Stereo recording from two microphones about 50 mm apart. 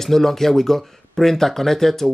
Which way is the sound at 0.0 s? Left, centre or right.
Centre.